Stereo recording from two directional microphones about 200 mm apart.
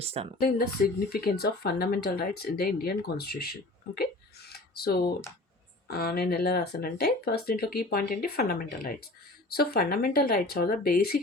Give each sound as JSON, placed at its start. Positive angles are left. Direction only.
{"t": 0.0, "sound": "speech", "side_deg": -30}
{"t": 0.3, "sound": "speech", "side_deg": 45}